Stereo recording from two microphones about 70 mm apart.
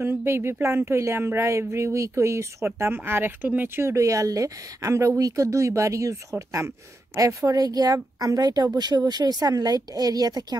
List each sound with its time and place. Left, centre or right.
0.0 s speech: right
3.9 s speech: right
7.4 s a woman's voice: right
8.7 s speech: right